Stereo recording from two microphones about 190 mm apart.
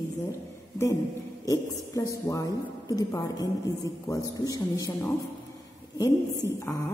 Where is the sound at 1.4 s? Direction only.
20° left (ahead or behind).